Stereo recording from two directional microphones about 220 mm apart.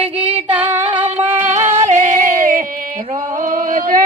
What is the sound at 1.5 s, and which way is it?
Yodeling, 30° right (ahead or behind).